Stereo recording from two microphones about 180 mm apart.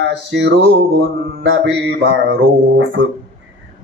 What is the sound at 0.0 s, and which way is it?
A man's voice, 75° right (ahead or behind).